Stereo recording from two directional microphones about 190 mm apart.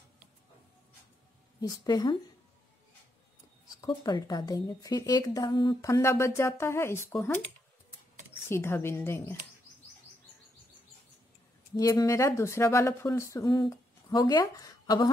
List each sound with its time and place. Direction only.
1.6 s a woman's voice: 20° left (ahead or behind)
3.8 s a woman's voice: 20° left (ahead or behind)
8.5 s a woman's voice: 15° left (ahead or behind)
11.7 s a woman's voice: 20° left (ahead or behind)